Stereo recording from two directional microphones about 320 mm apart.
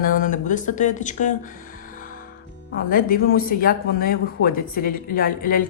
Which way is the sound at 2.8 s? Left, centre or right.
Left.